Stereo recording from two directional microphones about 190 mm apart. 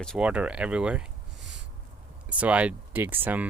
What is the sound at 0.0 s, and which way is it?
Speech, centre (ahead or behind).